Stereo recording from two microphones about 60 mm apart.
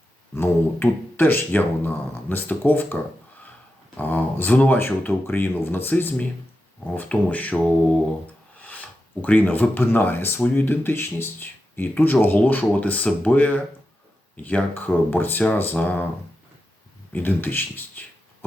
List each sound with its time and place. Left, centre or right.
0.3 s speech: left
4.8 s speech: left
8.6 s speech: left
17.1 s speech: left